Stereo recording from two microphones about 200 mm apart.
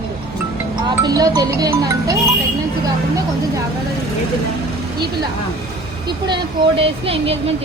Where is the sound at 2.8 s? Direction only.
15° right (ahead or behind).